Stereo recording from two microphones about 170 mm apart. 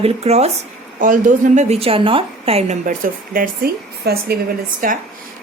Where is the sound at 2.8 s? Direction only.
55° right (ahead or behind).